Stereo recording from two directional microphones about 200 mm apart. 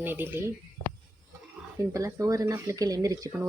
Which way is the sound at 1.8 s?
15° right (ahead or behind).